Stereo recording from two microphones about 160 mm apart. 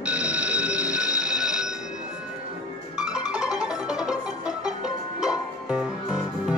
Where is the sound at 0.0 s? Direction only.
10° right (ahead or behind).